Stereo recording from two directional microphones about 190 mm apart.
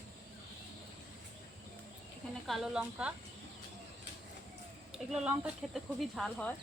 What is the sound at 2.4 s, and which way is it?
Speech, centre (ahead or behind).